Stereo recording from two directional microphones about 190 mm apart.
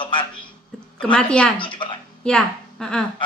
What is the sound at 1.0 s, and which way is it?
Speech, 5° left (ahead or behind).